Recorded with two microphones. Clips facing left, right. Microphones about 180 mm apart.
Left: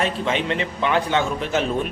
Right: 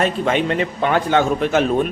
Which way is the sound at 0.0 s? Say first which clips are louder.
Right 4 dB; 50° right (ahead or behind).